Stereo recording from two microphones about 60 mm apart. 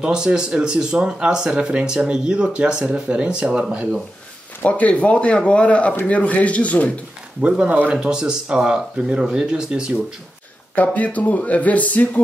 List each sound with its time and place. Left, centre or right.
0.0 s speech: centre
4.6 s speech: left
7.4 s speech: centre
10.7 s speech: left